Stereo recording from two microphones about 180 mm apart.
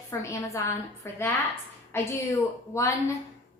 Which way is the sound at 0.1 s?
15° left (ahead or behind).